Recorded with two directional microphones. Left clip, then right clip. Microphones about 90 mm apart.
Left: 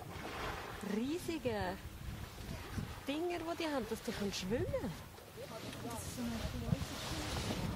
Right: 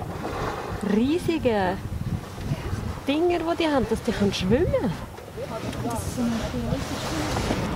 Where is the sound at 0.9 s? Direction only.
15° right (ahead or behind).